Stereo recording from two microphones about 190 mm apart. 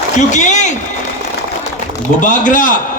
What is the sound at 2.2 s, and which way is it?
Speech, 45° left (ahead or behind).